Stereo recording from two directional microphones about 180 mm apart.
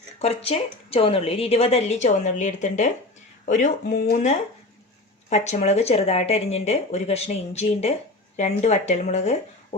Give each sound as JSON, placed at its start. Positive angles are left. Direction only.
{"t": 0.2, "sound": "a woman's voice", "side_deg": 35}